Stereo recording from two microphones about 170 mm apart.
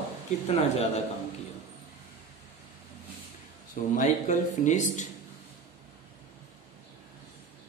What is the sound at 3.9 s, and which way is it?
Speech, 45° left (ahead or behind).